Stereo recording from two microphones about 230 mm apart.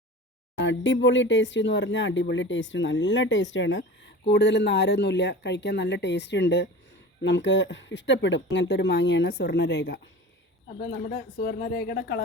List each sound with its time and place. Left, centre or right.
0.5 s speech: left